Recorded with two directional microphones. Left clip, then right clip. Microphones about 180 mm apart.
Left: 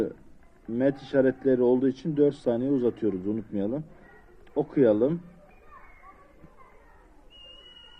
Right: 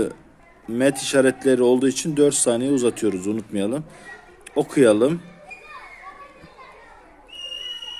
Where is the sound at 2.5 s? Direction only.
35° right (ahead or behind).